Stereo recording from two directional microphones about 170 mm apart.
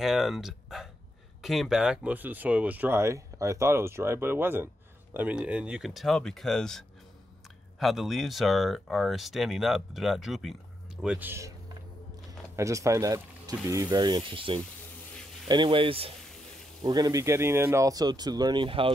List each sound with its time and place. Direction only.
0.0 s speech: centre (ahead or behind)
7.8 s speech: centre (ahead or behind); by 18.9 s 30° right (ahead or behind)